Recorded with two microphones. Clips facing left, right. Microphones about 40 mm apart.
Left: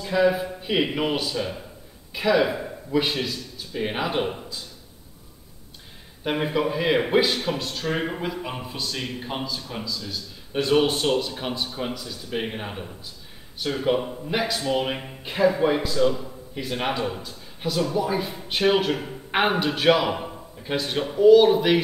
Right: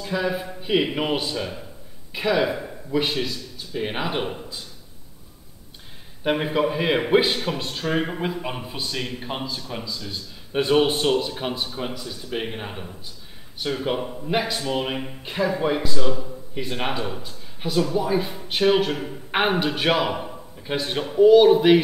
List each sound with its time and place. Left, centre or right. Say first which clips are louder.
0.0 s speech: left 4 dB; centre
2.4 s speech: even; centre
6.2 s a man's voice: right 2 dB; centre
20.2 s a sound: right 1 dB; centre
21.1 s speech: right 1 dB; centre